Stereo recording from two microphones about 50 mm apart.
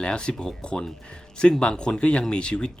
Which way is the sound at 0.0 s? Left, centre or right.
Centre.